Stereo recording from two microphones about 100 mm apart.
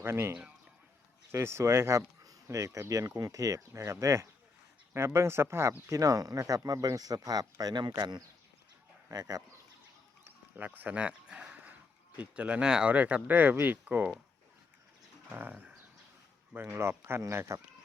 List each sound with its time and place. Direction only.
0.0 s speech: 25° right (ahead or behind)
10.5 s a sound: 15° right (ahead or behind)
12.2 s speech: 15° right (ahead or behind)
15.3 s speech: 15° right (ahead or behind)